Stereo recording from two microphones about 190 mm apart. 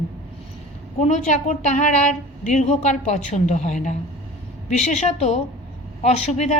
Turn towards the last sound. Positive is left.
turn(degrees=35)  # may be behind; listen again after turning